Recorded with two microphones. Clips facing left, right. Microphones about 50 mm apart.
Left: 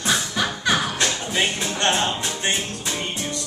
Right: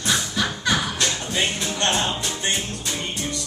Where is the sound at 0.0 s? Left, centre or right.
Centre.